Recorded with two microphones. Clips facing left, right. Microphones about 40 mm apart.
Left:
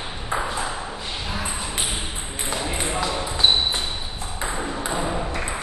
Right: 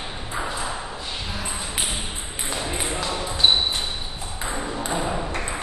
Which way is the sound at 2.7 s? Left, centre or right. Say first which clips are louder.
Left 3 dB; centre.